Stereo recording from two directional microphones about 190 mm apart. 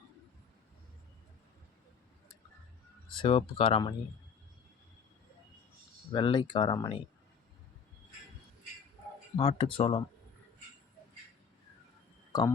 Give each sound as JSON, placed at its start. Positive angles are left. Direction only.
{"t": 3.2, "sound": "speech", "side_deg": 30}
{"t": 6.1, "sound": "speech", "side_deg": 25}
{"t": 9.4, "sound": "speech", "side_deg": 30}
{"t": 12.3, "sound": "speech", "side_deg": 25}